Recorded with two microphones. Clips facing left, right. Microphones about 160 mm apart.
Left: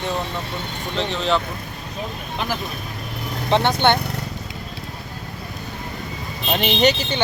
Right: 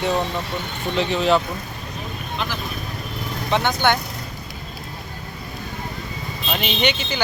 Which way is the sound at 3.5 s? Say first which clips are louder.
Left 2 dB; 30° left (ahead or behind).